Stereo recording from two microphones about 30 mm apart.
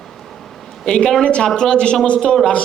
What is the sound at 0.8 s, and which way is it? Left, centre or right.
A woman's voice, left.